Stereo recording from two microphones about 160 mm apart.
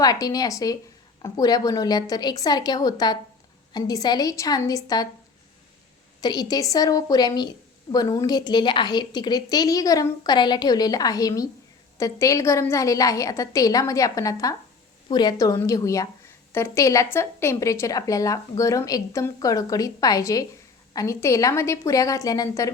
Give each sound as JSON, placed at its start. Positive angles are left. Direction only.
{"t": 0.0, "sound": "a woman's voice", "side_deg": 25}
{"t": 6.2, "sound": "a woman's voice", "side_deg": 25}